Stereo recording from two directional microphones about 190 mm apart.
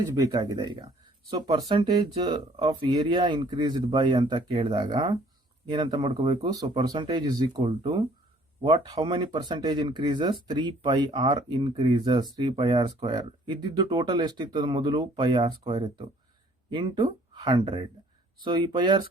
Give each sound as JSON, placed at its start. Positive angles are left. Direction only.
{"t": 0.0, "sound": "speech", "side_deg": -15}